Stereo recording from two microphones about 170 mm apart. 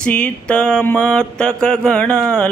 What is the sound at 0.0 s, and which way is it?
Mantra, 5° left (ahead or behind).